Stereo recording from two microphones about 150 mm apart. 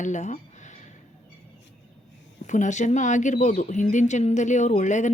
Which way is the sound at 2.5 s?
55° left (ahead or behind).